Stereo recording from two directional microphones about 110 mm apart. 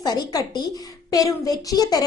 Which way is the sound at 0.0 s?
35° left (ahead or behind).